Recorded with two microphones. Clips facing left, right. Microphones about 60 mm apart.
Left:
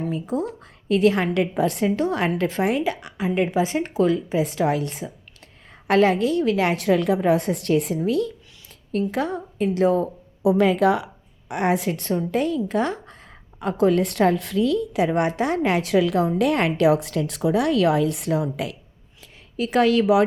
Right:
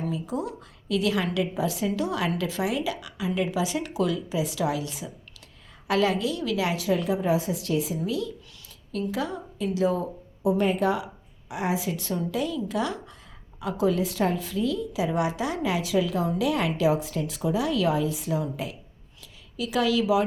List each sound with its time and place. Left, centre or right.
0.1 s a woman's voice: left
10.4 s a woman's voice: left
19.2 s a woman's voice: left